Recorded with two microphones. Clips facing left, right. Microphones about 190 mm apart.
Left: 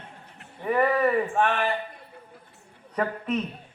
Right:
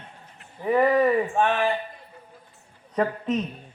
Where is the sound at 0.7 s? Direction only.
25° right (ahead or behind).